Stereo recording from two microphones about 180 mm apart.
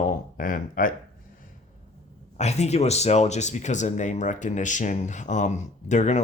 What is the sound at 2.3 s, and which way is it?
Speech, 40° left (ahead or behind).